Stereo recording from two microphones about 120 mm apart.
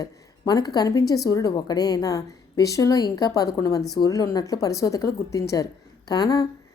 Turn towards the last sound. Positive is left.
turn(degrees=35)  # may be behind; listen again after turning